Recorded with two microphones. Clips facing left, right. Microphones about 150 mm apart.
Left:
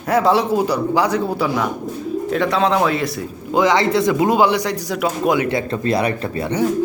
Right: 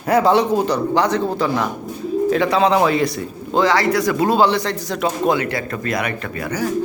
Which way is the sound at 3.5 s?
20° left (ahead or behind).